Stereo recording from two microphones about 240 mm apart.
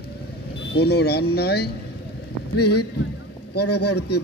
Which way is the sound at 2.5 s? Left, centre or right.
Left.